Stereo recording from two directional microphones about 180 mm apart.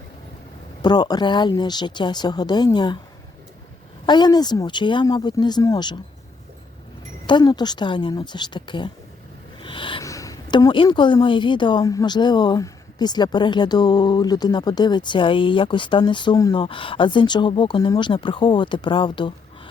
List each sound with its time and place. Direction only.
0.8 s a woman's voice: 25° left (ahead or behind)
4.0 s a woman's voice: 25° left (ahead or behind)
7.3 s a woman's voice: 25° left (ahead or behind)